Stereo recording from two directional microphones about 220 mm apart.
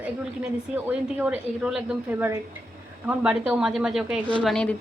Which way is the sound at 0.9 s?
10° right (ahead or behind).